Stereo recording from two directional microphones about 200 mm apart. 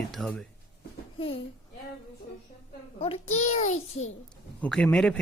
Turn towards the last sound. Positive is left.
turn(degrees=5)  # may be behind; listen again after turning